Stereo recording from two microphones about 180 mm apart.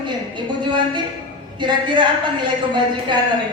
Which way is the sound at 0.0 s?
25° right (ahead or behind).